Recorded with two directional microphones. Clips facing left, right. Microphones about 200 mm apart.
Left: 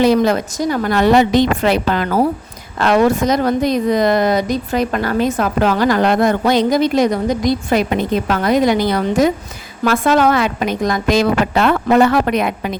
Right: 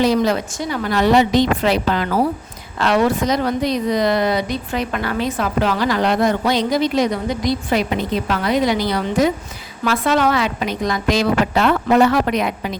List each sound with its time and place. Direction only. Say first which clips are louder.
0.0 s a woman's voice: left 3 dB; 55° left (ahead or behind)
0.5 s a woman's voice: left 4 dB; 45° left (ahead or behind)